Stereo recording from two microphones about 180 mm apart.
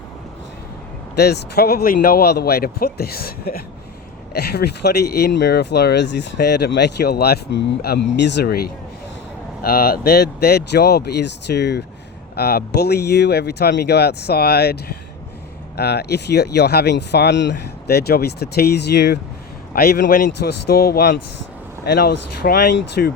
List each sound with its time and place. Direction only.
1.1 s speech: 65° left (ahead or behind)
19.7 s speech: 55° left (ahead or behind)